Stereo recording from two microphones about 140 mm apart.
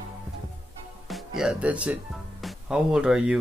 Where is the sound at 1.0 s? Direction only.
Centre (ahead or behind).